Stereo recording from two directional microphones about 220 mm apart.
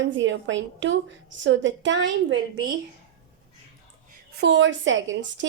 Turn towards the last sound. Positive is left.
turn(degrees=-55)  # may be behind; listen again after turning